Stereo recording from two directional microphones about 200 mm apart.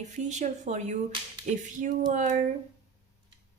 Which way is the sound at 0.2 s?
35° right (ahead or behind).